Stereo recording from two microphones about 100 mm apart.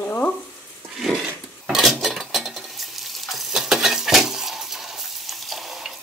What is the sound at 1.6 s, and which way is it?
Dishes, 5° right (ahead or behind).